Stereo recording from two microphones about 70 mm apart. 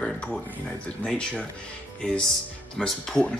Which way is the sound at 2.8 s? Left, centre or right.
Centre.